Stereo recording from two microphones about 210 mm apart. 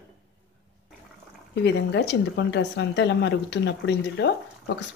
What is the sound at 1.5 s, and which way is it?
Speech, 55° left (ahead or behind).